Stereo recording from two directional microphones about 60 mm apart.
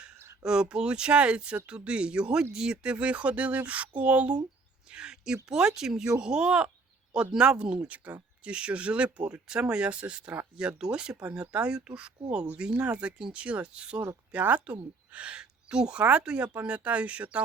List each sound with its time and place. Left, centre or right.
0.4 s a woman's voice: centre